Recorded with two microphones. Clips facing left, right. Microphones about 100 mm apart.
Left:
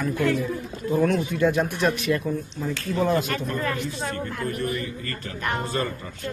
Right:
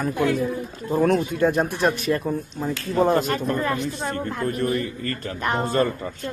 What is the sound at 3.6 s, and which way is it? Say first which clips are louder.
Speech: right 3 dB; 25° right (ahead or behind).